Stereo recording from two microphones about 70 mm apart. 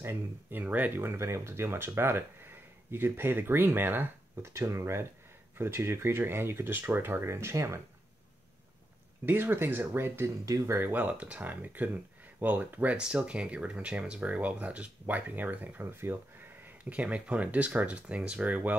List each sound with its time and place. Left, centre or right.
0.0 s speech: right
9.2 s speech: right
12.9 s speech: centre; by 16.4 s right
16.9 s speech: centre